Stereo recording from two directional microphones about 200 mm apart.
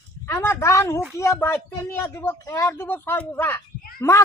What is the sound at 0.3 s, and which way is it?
A woman's voice, 10° left (ahead or behind).